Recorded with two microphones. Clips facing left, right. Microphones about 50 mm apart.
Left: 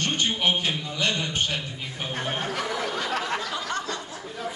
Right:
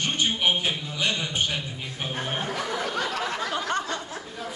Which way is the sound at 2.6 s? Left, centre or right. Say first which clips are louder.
Even; centre.